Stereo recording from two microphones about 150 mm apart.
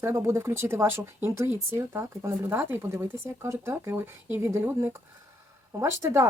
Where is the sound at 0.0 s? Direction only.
20° right (ahead or behind).